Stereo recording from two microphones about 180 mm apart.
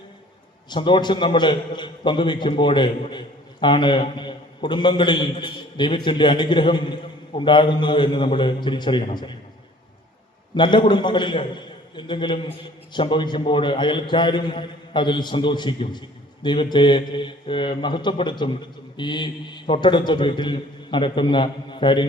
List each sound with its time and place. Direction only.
0.7 s a man's voice: 25° left (ahead or behind)
10.5 s a man's voice: 25° left (ahead or behind)